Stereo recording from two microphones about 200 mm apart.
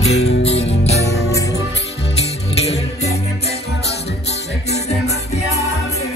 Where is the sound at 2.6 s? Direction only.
30° left (ahead or behind).